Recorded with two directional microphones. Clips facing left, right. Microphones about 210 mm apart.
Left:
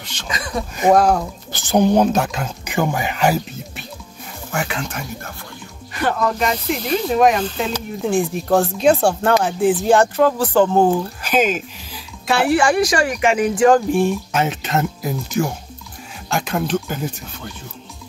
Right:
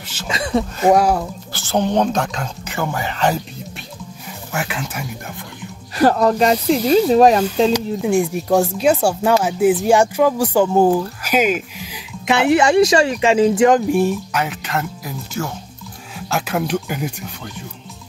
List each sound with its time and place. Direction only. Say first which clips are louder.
0.0 s speech: right 2 dB; 5° right (ahead or behind)
0.3 s speech: right 6 dB; 25° right (ahead or behind)
0.9 s speech: left 3 dB; 10° right (ahead or behind)
1.5 s speech: left 4 dB; 15° left (ahead or behind)
4.5 s speech: left 1 dB; 5° right (ahead or behind)
5.9 s speech: right 6 dB; 35° right (ahead or behind)
7.4 s speech: right 7 dB; 10° right (ahead or behind)
14.3 s speech: left 2 dB; 25° left (ahead or behind)
16.3 s speech: even; 5° right (ahead or behind)